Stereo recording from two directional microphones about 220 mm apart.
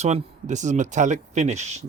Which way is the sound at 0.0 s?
30° right (ahead or behind).